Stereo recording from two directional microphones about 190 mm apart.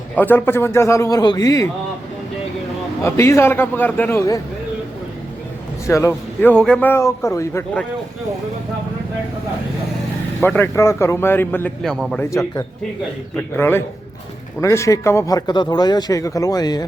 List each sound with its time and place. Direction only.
0.2 s a man's voice: 10° left (ahead or behind)
3.0 s a man's voice: 15° left (ahead or behind)
5.8 s a man's voice: 15° left (ahead or behind)
10.4 s a man's voice: 10° left (ahead or behind)
12.3 s a man's voice: 15° left (ahead or behind)